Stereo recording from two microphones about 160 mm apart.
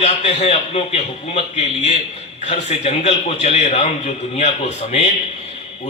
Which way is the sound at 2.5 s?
45° left (ahead or behind).